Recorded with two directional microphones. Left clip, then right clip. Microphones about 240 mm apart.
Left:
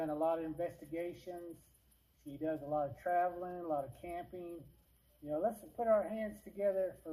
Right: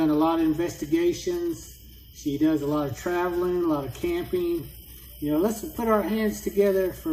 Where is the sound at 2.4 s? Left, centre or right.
Left.